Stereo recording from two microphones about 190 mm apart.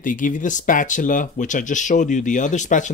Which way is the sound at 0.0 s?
45° left (ahead or behind).